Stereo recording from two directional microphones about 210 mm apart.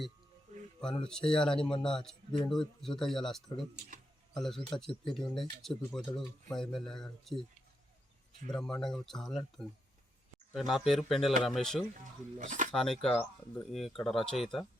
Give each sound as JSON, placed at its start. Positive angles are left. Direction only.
{"t": 1.0, "sound": "speech", "side_deg": 5}
{"t": 8.4, "sound": "speech", "side_deg": 5}
{"t": 12.4, "sound": "speech", "side_deg": -35}
{"t": 12.7, "sound": "speech", "side_deg": 0}